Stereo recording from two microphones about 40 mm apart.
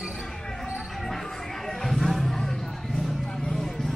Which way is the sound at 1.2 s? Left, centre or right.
Centre.